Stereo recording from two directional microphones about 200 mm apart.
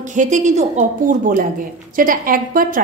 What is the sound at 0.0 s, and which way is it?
A woman's voice, 40° right (ahead or behind).